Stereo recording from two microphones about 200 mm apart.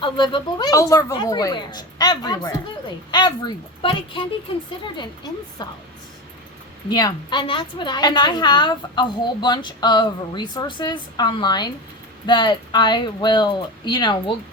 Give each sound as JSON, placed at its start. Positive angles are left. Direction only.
{"t": 0.0, "sound": "a woman's voice", "side_deg": 25}
{"t": 5.6, "sound": "a woman's voice", "side_deg": 20}
{"t": 6.9, "sound": "a woman's voice", "side_deg": 20}